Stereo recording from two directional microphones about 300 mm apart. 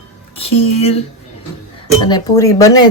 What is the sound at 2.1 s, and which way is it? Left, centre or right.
Speech, centre.